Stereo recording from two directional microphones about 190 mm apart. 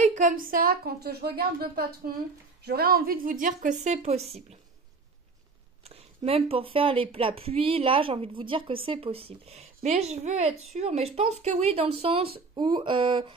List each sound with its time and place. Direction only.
0.0 s a woman's voice: 40° right (ahead or behind)
5.9 s speech: 30° right (ahead or behind)